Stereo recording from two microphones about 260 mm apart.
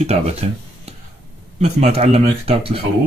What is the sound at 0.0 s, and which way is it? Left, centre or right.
Speech, right.